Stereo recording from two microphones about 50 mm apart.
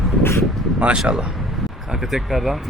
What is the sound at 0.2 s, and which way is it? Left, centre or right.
Speech, left.